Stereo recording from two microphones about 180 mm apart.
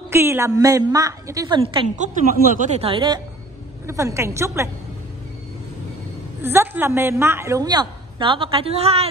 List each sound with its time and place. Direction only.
0.1 s a woman's voice: 15° right (ahead or behind)
2.0 s speech: 45° right (ahead or behind); by 3.2 s 25° right (ahead or behind)
3.8 s a woman's voice: 15° right (ahead or behind)
6.4 s a woman's voice: 10° right (ahead or behind); by 9.1 s 35° right (ahead or behind)